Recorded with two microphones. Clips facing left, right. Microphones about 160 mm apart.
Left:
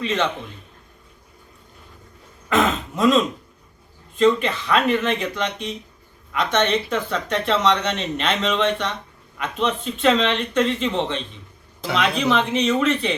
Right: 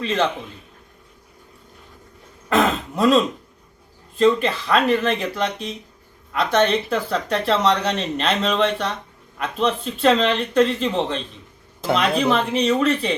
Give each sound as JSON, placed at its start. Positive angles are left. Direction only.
{"t": 0.0, "sound": "a man's voice", "side_deg": -35}
{"t": 2.5, "sound": "throat clearing", "side_deg": -35}
{"t": 4.2, "sound": "speech", "side_deg": -35}